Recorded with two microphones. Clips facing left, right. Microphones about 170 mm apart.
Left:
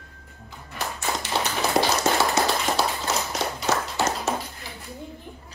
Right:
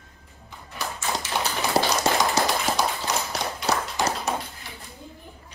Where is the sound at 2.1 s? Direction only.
15° right (ahead or behind).